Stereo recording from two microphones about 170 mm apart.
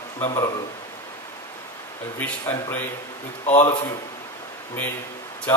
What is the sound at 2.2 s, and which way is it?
Speech, 10° left (ahead or behind).